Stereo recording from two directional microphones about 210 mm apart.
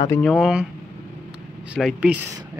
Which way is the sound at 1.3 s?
5° right (ahead or behind).